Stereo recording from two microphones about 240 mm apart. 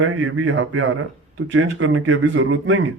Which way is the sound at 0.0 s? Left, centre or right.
Right.